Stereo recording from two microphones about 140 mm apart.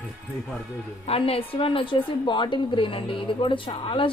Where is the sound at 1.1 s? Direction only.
45° left (ahead or behind).